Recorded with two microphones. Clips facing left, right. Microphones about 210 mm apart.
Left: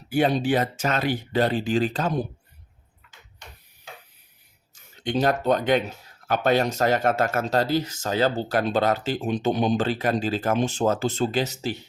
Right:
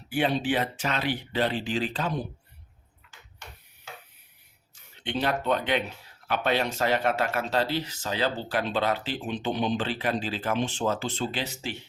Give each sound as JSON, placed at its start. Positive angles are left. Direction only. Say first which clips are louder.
{"t": 0.1, "sound": "speech", "louder": "left 4 dB", "side_deg": 40}
{"t": 4.7, "sound": "speech", "louder": "left 6 dB", "side_deg": 40}